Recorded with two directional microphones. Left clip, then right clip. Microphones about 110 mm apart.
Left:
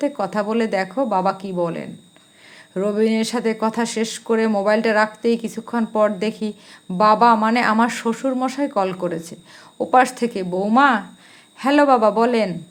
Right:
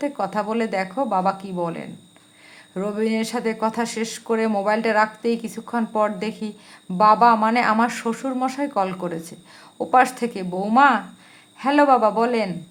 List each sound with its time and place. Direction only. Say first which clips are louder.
0.0 s speech: left 2 dB; 25° left (ahead or behind)